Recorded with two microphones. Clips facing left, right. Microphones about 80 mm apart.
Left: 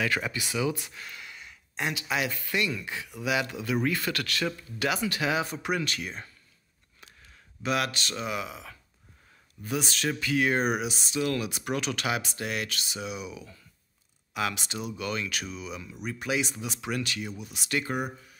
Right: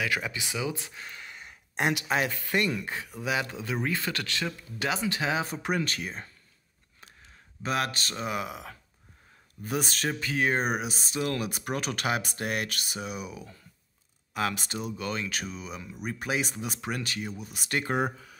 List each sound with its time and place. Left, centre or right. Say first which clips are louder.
0.0 s speech: left 1 dB; centre
0.9 s a sound: even; right
1.8 s speech: right 4 dB; right
2.0 s speech: right 2 dB; right
5.9 s speech: even; centre
7.6 s speech: left 1 dB; right
17.8 s speech: right 3 dB; right